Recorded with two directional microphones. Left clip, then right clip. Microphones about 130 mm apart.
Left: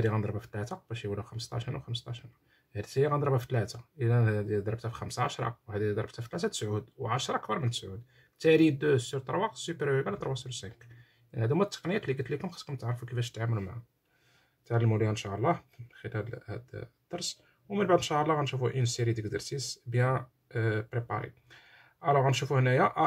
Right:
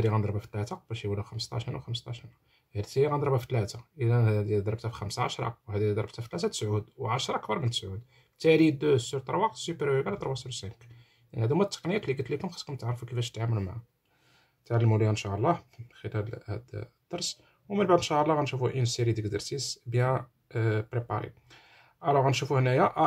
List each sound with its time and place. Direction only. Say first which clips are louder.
0.0 s speech: right 2 dB; 15° right (ahead or behind)